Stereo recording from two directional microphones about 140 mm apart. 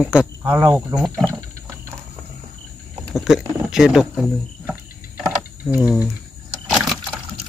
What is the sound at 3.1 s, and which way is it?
Speech, 5° right (ahead or behind).